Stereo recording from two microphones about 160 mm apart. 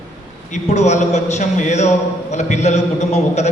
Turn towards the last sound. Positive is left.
turn(degrees=45)  # may be behind; listen again after turning